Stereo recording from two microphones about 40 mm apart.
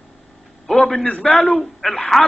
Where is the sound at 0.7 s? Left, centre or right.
Centre.